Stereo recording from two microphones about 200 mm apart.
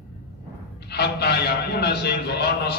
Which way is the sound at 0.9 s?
55° left (ahead or behind).